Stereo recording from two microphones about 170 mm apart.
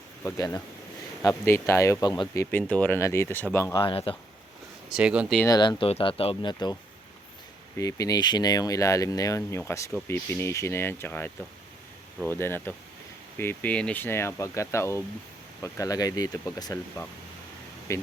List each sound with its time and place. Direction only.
0.3 s speech: 20° left (ahead or behind)
4.9 s speech: 5° right (ahead or behind)
5.5 s speech: 25° left (ahead or behind)
7.8 s speech: 20° left (ahead or behind)